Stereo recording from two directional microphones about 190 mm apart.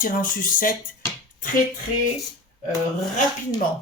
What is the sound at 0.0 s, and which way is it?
Speech, 45° left (ahead or behind).